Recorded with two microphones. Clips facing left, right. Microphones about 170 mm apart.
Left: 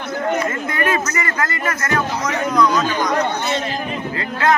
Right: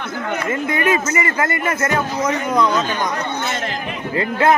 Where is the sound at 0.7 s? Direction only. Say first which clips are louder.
Right 4 dB; 20° right (ahead or behind).